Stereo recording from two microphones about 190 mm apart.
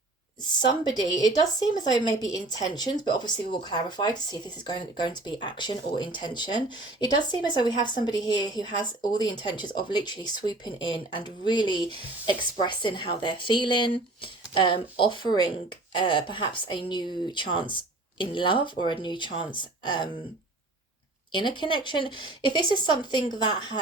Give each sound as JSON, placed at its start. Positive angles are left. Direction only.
{"t": 0.7, "sound": "speech", "side_deg": 20}
{"t": 21.3, "sound": "speech", "side_deg": 25}